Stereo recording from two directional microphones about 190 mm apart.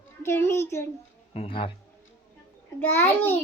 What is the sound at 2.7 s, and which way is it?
Speech, 10° left (ahead or behind).